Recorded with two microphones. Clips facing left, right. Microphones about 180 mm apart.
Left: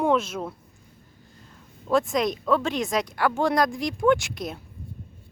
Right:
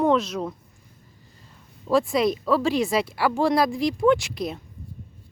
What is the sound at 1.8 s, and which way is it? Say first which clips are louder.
Speech: right 2 dB; 5° right (ahead or behind).